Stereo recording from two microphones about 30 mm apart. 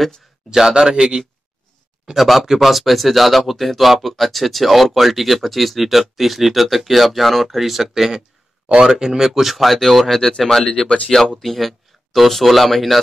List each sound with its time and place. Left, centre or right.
0.5 s a man's voice: right
2.1 s speech: centre